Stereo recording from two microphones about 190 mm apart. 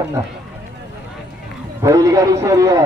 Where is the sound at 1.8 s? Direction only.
15° right (ahead or behind).